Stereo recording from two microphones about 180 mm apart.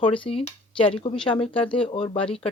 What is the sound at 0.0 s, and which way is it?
Speech, 30° left (ahead or behind).